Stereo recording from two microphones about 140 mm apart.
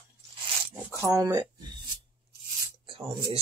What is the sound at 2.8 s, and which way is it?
Speech, 40° right (ahead or behind).